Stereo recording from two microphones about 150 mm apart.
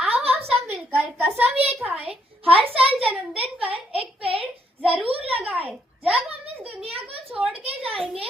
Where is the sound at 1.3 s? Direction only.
10° right (ahead or behind).